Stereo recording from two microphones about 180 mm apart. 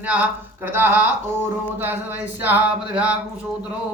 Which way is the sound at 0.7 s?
10° right (ahead or behind).